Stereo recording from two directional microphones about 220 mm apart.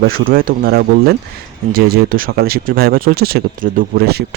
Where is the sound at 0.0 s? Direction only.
40° right (ahead or behind).